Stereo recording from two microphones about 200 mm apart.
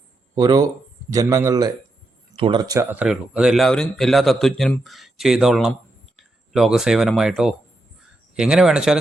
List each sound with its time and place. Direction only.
0.3 s a man's voice: 15° right (ahead or behind)